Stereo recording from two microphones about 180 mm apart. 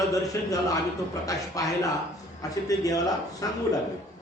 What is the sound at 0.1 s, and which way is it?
A man's voice, 20° left (ahead or behind).